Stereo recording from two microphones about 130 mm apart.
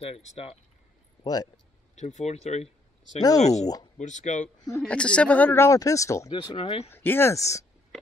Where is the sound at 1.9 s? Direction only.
65° left (ahead or behind).